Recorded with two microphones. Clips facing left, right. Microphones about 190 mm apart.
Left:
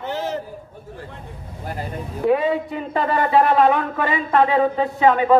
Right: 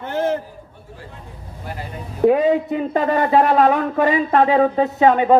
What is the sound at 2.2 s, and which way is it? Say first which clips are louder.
Speech: right 4 dB; 40° right (ahead or behind).